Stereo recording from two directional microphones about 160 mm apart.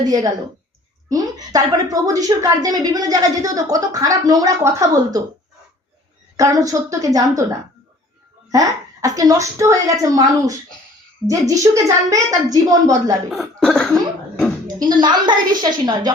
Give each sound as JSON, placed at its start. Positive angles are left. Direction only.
{"t": 0.1, "sound": "a woman's voice", "side_deg": -25}
{"t": 6.3, "sound": "a woman's voice", "side_deg": -20}
{"t": 8.4, "sound": "a woman's voice", "side_deg": -20}
{"t": 13.3, "sound": "cough", "side_deg": 0}
{"t": 14.8, "sound": "a woman's voice", "side_deg": -25}